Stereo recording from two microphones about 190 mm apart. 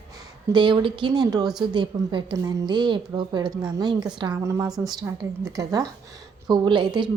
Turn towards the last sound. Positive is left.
turn(degrees=-25)  # may be behind; listen again after turning